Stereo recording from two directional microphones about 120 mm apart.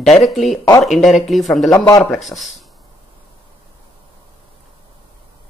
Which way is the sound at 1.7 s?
25° left (ahead or behind).